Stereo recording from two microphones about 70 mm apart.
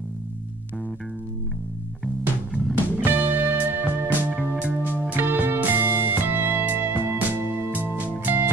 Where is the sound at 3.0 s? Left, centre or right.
Right.